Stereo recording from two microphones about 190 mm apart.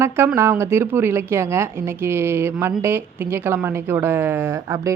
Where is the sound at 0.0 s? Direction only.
15° right (ahead or behind).